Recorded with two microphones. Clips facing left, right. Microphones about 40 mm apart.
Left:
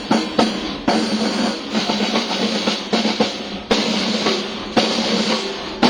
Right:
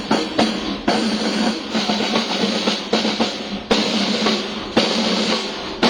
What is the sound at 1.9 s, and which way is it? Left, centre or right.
Train, right.